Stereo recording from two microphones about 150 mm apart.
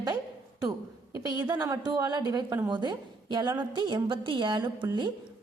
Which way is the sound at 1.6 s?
25° right (ahead or behind).